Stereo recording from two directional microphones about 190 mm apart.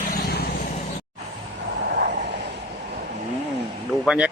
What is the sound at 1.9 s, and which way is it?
Vehicle, 60° right (ahead or behind).